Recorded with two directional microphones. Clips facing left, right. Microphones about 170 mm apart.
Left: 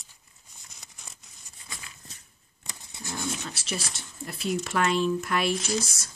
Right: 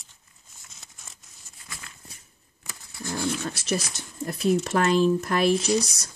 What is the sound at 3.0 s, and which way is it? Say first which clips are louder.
Dog: right 6 dB; 20° left (ahead or behind).